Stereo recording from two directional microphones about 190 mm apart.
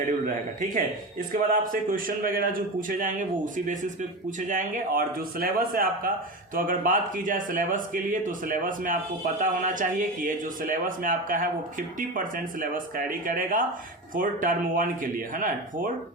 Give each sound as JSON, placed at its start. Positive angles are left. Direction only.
{"t": 1.3, "sound": "speech", "side_deg": -45}